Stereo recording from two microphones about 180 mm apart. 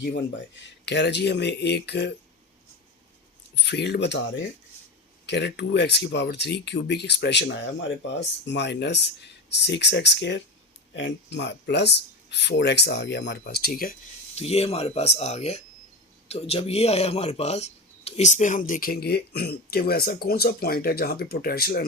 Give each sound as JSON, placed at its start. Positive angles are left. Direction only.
{"t": 0.9, "sound": "speech", "side_deg": 70}
{"t": 3.5, "sound": "speech", "side_deg": 70}
{"t": 10.9, "sound": "speech", "side_deg": 80}
{"t": 13.4, "sound": "speech", "side_deg": 60}
{"t": 14.3, "sound": "speech", "side_deg": 35}